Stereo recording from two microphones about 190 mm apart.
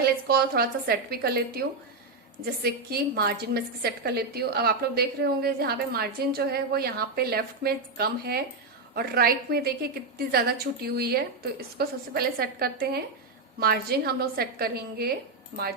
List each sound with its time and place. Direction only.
0.0 s a woman's voice: 55° right (ahead or behind)
2.6 s a woman's voice: 55° right (ahead or behind)